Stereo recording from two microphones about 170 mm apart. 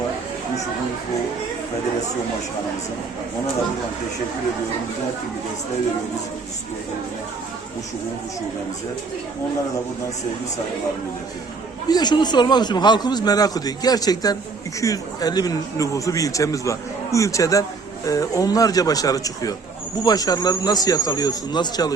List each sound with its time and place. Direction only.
11.9 s speech: 25° left (ahead or behind)